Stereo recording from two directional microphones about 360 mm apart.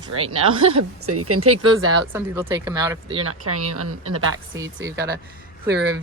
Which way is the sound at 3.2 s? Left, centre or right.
Right.